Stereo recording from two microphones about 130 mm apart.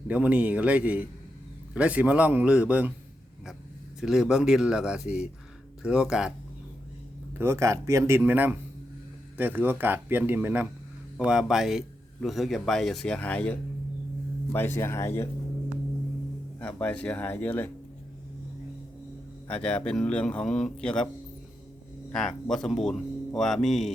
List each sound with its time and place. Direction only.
0.1 s speech: 10° right (ahead or behind)
4.0 s speech: 5° right (ahead or behind)
7.3 s speech: 20° right (ahead or behind); by 15.3 s 20° left (ahead or behind)
16.6 s a man's voice: 10° left (ahead or behind)
19.5 s a man's voice: 10° left (ahead or behind)
22.1 s speech: 5° left (ahead or behind)